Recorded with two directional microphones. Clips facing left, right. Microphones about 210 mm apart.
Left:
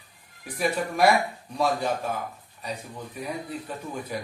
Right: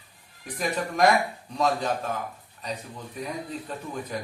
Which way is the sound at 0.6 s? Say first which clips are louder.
Left 1 dB; 10° left (ahead or behind).